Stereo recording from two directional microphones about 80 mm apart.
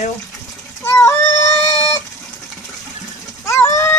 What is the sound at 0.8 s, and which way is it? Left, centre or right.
Cat, left.